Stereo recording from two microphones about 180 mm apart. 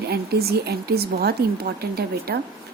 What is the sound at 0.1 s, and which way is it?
A woman's voice, 60° right (ahead or behind).